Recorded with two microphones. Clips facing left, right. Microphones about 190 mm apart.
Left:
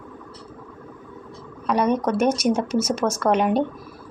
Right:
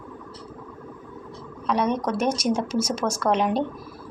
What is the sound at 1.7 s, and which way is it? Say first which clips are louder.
Speech: left 3 dB; 10° left (ahead or behind).